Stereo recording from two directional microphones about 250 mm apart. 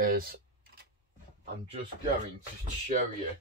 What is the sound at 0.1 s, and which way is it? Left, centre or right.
Computer keyboard, right.